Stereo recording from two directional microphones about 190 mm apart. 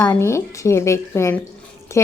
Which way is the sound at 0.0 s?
15° left (ahead or behind).